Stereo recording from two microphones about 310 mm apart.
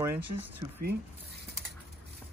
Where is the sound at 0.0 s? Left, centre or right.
Centre.